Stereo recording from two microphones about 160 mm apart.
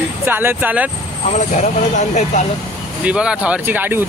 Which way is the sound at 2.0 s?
45° left (ahead or behind).